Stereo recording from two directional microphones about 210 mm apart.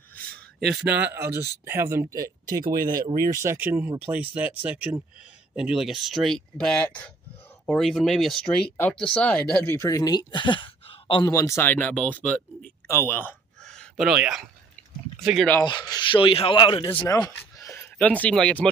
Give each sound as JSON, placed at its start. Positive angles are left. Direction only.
{"t": 0.7, "sound": "speech", "side_deg": -10}
{"t": 12.8, "sound": "a sound", "side_deg": 10}
{"t": 15.1, "sound": "speech", "side_deg": 0}
{"t": 15.9, "sound": "speech", "side_deg": 20}
{"t": 16.9, "sound": "speech", "side_deg": 10}